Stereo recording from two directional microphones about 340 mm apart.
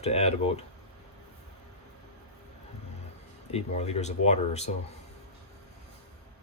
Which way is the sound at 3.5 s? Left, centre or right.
Centre.